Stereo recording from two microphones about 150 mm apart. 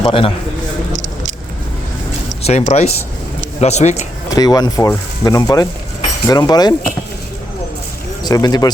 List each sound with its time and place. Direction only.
0.0 s a man's voice: 35° left (ahead or behind)
0.9 s vehicle: 55° right (ahead or behind)
2.4 s speech: 45° left (ahead or behind)
4.4 s speech: 25° left (ahead or behind)
8.2 s speech: 25° left (ahead or behind)